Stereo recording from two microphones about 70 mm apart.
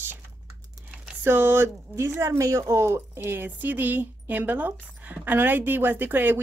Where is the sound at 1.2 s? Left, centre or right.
Right.